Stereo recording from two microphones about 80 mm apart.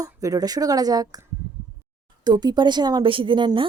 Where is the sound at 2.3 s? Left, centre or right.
Right.